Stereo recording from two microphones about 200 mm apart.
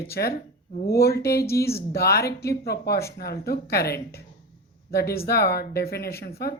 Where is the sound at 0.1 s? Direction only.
50° left (ahead or behind).